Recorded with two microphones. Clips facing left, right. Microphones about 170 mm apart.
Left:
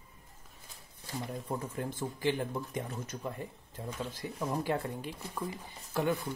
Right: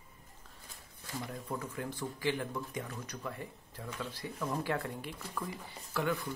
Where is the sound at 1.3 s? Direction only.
30° left (ahead or behind).